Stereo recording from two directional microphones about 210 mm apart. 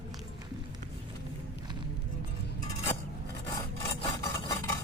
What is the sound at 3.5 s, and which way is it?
Filing, 15° left (ahead or behind).